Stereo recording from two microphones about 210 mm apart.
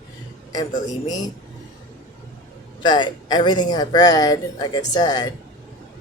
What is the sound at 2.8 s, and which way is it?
Speech, 20° left (ahead or behind).